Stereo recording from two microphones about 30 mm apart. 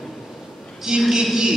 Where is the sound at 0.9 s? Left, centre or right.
Right.